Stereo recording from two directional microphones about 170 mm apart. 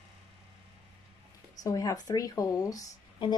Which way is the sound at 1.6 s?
20° left (ahead or behind).